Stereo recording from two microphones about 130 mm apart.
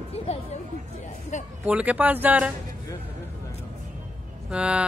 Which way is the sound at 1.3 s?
65° left (ahead or behind).